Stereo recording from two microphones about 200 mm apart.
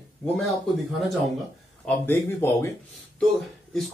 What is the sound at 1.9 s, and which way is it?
Speech, 10° left (ahead or behind).